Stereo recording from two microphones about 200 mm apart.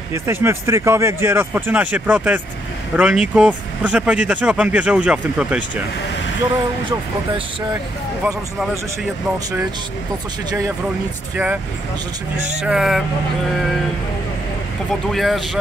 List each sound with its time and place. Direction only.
0.1 s speech: 10° right (ahead or behind)
8.2 s speech: 5° right (ahead or behind)
12.6 s speech: centre (ahead or behind)
15.0 s speech: centre (ahead or behind)